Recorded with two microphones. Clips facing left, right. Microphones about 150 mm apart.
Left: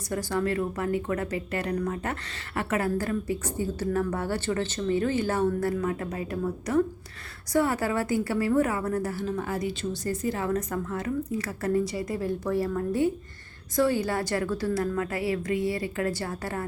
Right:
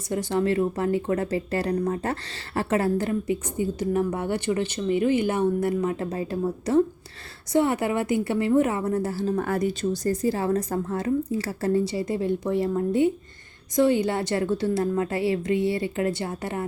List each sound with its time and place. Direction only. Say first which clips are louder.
0.1 s a woman's voice: right 4 dB; 20° right (ahead or behind)
9.3 s a woman's voice: right 5 dB; 55° right (ahead or behind); by 16.6 s 20° right (ahead or behind)